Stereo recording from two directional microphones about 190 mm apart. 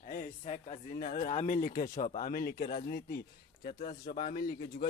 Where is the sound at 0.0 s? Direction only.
45° left (ahead or behind).